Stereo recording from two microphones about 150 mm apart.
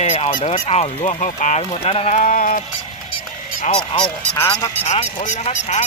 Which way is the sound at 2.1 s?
60° left (ahead or behind).